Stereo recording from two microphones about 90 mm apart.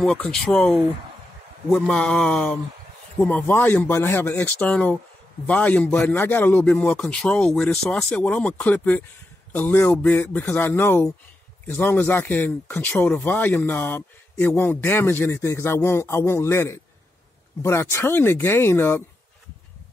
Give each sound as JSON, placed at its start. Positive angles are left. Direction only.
{"t": 0.0, "sound": "speech", "side_deg": 10}
{"t": 3.2, "sound": "a man's voice", "side_deg": 20}
{"t": 6.6, "sound": "a man's voice", "side_deg": 10}